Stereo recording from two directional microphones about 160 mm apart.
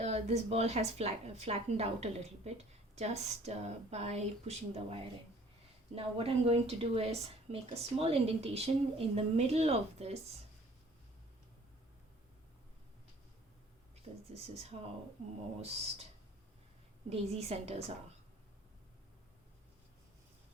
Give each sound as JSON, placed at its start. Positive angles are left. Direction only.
{"t": 0.0, "sound": "speech", "side_deg": -40}
{"t": 14.3, "sound": "speech", "side_deg": -40}
{"t": 17.1, "sound": "speech", "side_deg": -40}